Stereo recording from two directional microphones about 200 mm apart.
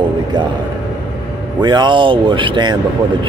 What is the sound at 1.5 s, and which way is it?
Speech, 20° right (ahead or behind).